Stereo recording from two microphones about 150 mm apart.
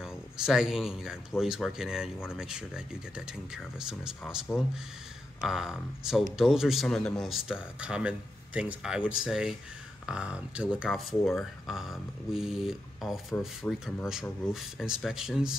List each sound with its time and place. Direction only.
0.0 s a man's voice: 5° right (ahead or behind)